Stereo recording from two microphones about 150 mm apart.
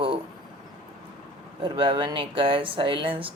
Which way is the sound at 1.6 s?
35° right (ahead or behind).